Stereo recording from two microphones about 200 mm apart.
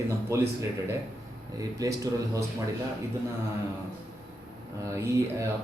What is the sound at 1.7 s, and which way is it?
Speech, 15° right (ahead or behind).